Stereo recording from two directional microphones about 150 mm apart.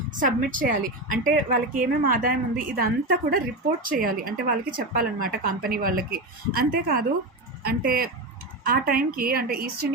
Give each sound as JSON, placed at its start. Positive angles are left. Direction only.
{"t": 0.2, "sound": "a woman's voice", "side_deg": -60}